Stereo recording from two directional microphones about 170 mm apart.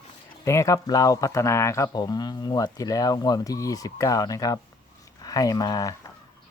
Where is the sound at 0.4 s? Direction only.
15° left (ahead or behind).